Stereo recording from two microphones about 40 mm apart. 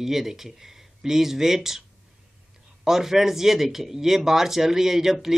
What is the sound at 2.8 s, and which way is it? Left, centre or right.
Speech, centre.